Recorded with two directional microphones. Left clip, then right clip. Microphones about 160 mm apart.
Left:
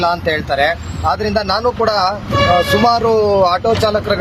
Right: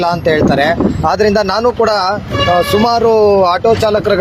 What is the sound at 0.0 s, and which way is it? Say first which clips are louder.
Speech: right 4 dB; 30° right (ahead or behind).